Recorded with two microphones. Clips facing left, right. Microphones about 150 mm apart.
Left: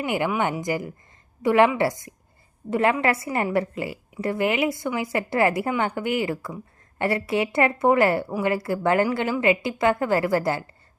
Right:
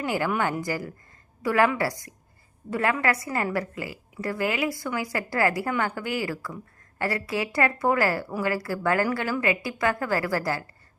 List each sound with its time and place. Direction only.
0.0 s a woman's voice: 20° left (ahead or behind)